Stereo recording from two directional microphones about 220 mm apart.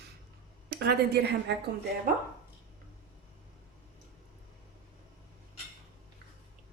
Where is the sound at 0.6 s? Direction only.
45° right (ahead or behind).